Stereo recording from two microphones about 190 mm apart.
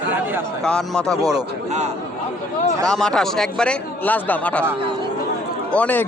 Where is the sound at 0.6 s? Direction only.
5° left (ahead or behind).